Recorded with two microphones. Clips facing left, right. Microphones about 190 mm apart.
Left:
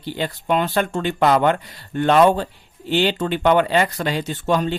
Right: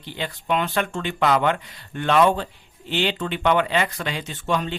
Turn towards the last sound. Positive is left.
turn(degrees=40)  # may be behind; listen again after turning